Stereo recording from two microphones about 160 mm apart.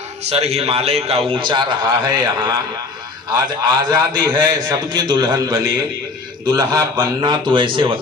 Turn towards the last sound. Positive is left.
turn(degrees=-30)  # may be behind; listen again after turning